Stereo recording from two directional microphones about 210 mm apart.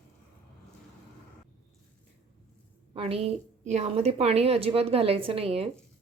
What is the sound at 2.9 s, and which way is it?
A woman's voice, 30° right (ahead or behind).